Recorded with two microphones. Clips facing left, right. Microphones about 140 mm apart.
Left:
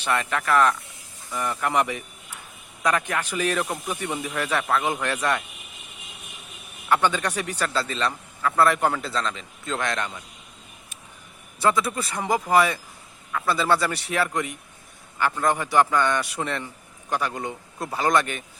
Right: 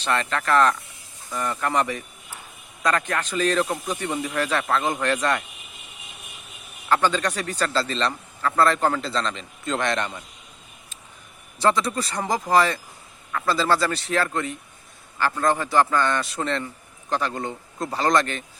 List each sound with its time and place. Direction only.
0.0 s speech: 10° left (ahead or behind)
6.8 s a man's voice: 10° left (ahead or behind)
11.6 s a man's voice: 5° left (ahead or behind)